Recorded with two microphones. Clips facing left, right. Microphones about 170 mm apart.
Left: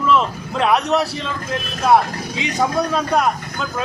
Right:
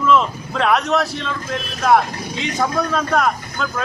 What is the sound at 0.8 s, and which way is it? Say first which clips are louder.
Speech: left 1 dB; 35° left (ahead or behind).